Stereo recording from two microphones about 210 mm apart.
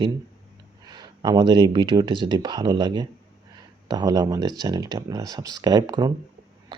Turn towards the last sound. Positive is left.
turn(degrees=-20)  # may be behind; listen again after turning